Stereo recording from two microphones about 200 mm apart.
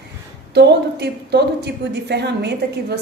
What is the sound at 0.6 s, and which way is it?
A woman's voice, 55° right (ahead or behind).